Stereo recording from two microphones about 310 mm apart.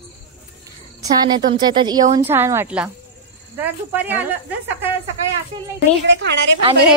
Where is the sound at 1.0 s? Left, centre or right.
Centre.